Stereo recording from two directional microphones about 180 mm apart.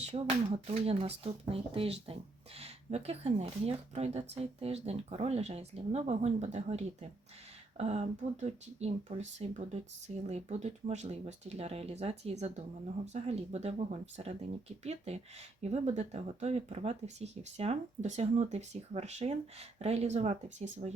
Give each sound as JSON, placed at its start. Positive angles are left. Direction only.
{"t": 0.0, "sound": "speech", "side_deg": -35}